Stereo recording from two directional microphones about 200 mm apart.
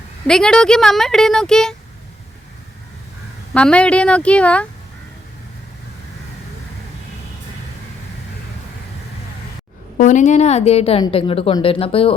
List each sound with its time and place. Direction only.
0.3 s speech: 5° left (ahead or behind)
3.5 s speech: 5° left (ahead or behind)
10.0 s a woman's voice: 40° left (ahead or behind)